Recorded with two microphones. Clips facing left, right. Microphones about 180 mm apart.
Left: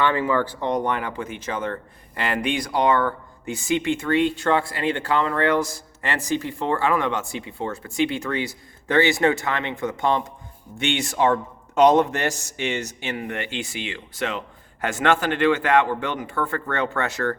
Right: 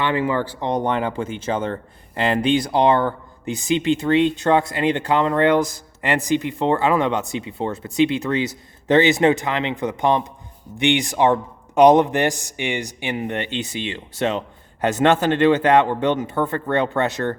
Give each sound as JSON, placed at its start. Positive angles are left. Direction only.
{"t": 0.0, "sound": "speech", "side_deg": -15}